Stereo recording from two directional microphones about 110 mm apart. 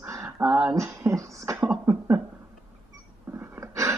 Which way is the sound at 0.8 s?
30° right (ahead or behind).